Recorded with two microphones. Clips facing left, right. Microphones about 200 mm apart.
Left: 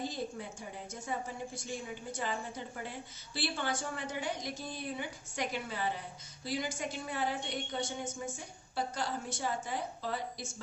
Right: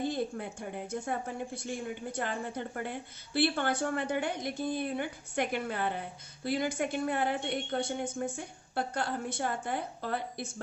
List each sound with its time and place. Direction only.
0.0 s a woman's voice: 55° right (ahead or behind)